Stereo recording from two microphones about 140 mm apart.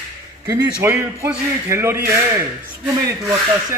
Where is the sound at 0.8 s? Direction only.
20° right (ahead or behind).